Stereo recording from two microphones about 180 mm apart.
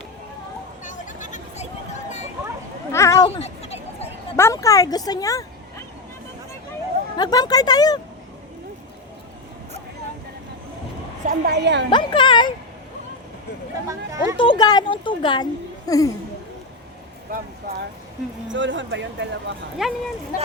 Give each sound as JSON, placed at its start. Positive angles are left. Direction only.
{"t": 0.9, "sound": "a sound", "side_deg": 45}
{"t": 2.9, "sound": "a sound", "side_deg": 15}
{"t": 3.2, "sound": "a sound", "side_deg": 35}
{"t": 4.4, "sound": "speech", "side_deg": 15}
{"t": 7.2, "sound": "speech", "side_deg": 20}
{"t": 11.3, "sound": "a woman's voice", "side_deg": -70}
{"t": 11.9, "sound": "speech", "side_deg": 25}
{"t": 13.8, "sound": "speech", "side_deg": -15}
{"t": 14.3, "sound": "speech", "side_deg": 25}
{"t": 17.3, "sound": "a sound", "side_deg": -55}
{"t": 18.5, "sound": "speech", "side_deg": -90}
{"t": 19.8, "sound": "speech", "side_deg": -5}
{"t": 20.3, "sound": "speech", "side_deg": 50}